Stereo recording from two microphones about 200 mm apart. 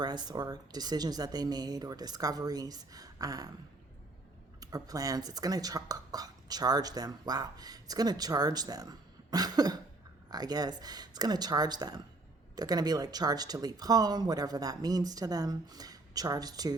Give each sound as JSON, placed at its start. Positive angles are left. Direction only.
{"t": 0.0, "sound": "speech", "side_deg": -20}
{"t": 4.6, "sound": "speech", "side_deg": -20}